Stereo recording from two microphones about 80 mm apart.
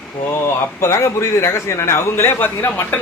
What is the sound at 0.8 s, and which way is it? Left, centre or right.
A man's voice, left.